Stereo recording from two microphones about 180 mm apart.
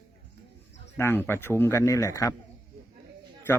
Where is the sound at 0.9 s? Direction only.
10° left (ahead or behind).